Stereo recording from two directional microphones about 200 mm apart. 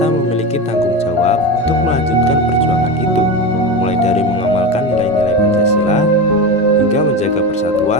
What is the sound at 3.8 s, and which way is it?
Music, 30° left (ahead or behind).